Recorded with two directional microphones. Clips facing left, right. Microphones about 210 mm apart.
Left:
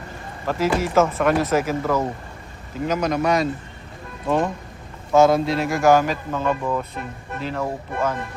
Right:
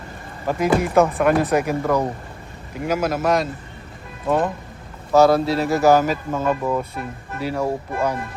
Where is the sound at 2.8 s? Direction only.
10° right (ahead or behind).